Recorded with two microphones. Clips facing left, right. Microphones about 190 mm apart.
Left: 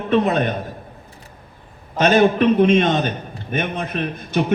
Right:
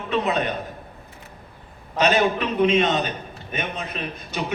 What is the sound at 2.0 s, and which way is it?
A man's voice, 50° left (ahead or behind).